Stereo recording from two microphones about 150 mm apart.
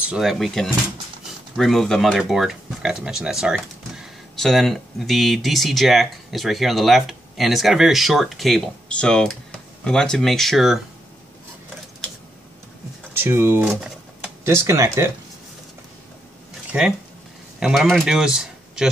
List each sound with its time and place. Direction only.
0.1 s speech: centre (ahead or behind)
13.2 s speech: 15° right (ahead or behind)
16.7 s speech: 5° right (ahead or behind)